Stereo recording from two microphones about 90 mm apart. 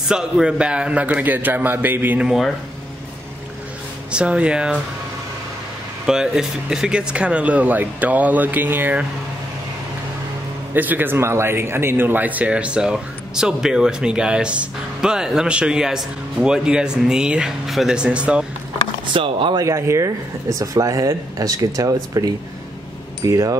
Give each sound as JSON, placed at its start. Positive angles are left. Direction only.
{"t": 0.1, "sound": "a man's voice", "side_deg": -10}
{"t": 2.1, "sound": "speech", "side_deg": -5}
{"t": 4.1, "sound": "a man's voice", "side_deg": -10}
{"t": 6.0, "sound": "a man's voice", "side_deg": -5}
{"t": 10.7, "sound": "a man's voice", "side_deg": -20}
{"t": 19.1, "sound": "speech", "side_deg": -75}
{"t": 19.5, "sound": "speech", "side_deg": -35}